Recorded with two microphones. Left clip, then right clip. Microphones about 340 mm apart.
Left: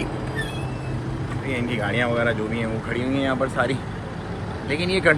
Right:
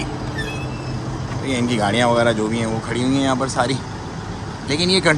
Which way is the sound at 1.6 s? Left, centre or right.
Centre.